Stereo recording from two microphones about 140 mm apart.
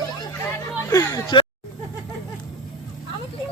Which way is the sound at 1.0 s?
15° left (ahead or behind).